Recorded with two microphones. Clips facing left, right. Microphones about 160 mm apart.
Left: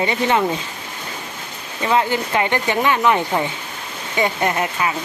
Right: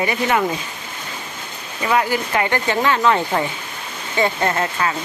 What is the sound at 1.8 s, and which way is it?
Speech, 25° left (ahead or behind).